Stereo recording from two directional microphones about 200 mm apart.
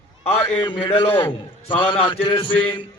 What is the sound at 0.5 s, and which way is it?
A man's voice, 25° left (ahead or behind).